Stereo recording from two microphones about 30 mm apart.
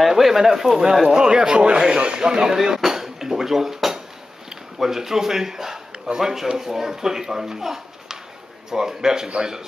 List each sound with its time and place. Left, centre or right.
0.2 s speech: centre
1.0 s speech: right
2.5 s speech: centre